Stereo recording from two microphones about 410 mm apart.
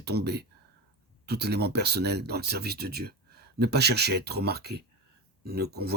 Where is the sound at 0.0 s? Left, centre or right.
Right.